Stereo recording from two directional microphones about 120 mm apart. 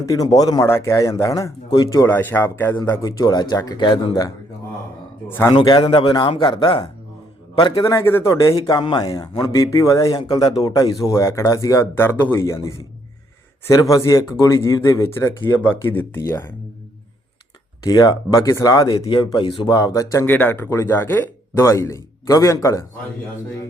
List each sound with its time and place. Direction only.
0.0 s a man's voice: 30° left (ahead or behind)
5.5 s a man's voice: 40° left (ahead or behind)
7.9 s a man's voice: 20° left (ahead or behind)
17.8 s a man's voice: 30° left (ahead or behind)
19.0 s a man's voice: 45° left (ahead or behind); by 20.2 s 25° left (ahead or behind)
20.2 s speech: 15° left (ahead or behind)